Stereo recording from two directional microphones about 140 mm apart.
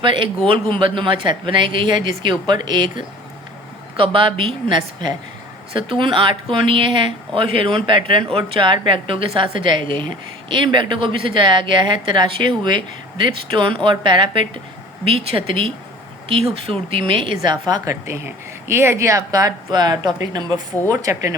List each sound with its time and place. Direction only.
0.0 s speech: 35° right (ahead or behind)
17.5 s a woman's voice: 30° right (ahead or behind)